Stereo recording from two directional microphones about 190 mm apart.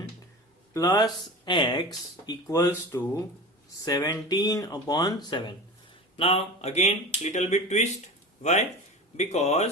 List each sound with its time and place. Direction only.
0.7 s speech: 20° left (ahead or behind); by 9.6 s 35° left (ahead or behind)